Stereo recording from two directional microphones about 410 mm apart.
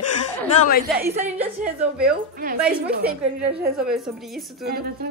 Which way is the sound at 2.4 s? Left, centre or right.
Right.